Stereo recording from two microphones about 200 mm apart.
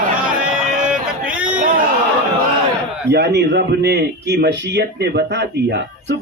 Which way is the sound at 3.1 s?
55° right (ahead or behind).